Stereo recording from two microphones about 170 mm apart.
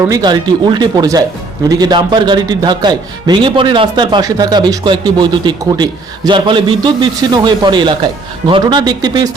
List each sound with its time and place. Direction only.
0.0 s a man's voice: 20° right (ahead or behind)